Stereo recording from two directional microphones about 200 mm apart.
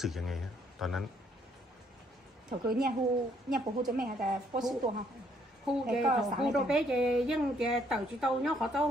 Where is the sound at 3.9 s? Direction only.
45° right (ahead or behind).